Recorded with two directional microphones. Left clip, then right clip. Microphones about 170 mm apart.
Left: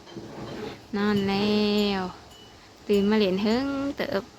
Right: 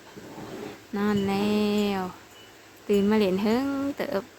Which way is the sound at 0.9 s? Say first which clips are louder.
Left 1 dB; 10° right (ahead or behind).